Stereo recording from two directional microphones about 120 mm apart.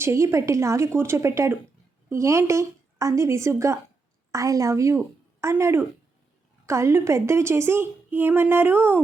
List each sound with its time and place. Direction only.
0.0 s a woman's voice: 25° right (ahead or behind)